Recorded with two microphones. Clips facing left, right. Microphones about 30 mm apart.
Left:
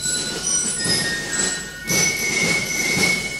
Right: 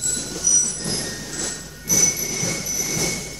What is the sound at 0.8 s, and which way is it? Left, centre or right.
Music, left.